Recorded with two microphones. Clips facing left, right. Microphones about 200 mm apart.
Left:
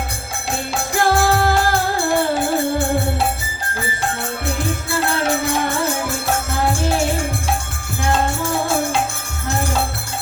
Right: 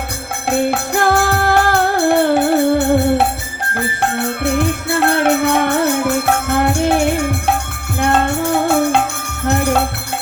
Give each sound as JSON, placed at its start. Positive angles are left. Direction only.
{"t": 0.4, "sound": "music", "side_deg": -60}